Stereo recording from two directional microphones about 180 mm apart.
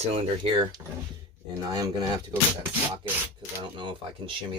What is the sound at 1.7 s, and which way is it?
Speech, 25° right (ahead or behind).